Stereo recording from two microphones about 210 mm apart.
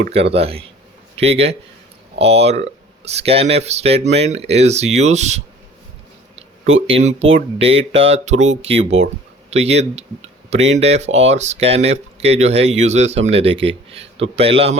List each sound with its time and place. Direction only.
0.1 s a man's voice: 30° right (ahead or behind)
6.8 s speech: 30° right (ahead or behind)